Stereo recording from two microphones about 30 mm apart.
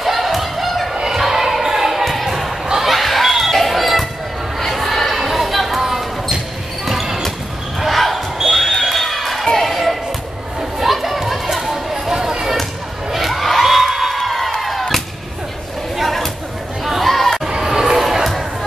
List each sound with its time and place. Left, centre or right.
0.0 s thump: centre
1.1 s basketball bounce: centre
2.0 s a sound: centre
2.9 s basketball bounce: centre
10.8 s a sound: centre
11.5 s chatter: centre
11.9 s a sound: centre
13.1 s crowd: centre
14.6 s music: centre
16.0 s chatter: centre
17.5 s crowd: centre
17.9 s a sound: centre